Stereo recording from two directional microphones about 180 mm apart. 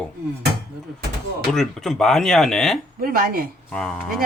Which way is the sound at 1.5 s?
Centre (ahead or behind).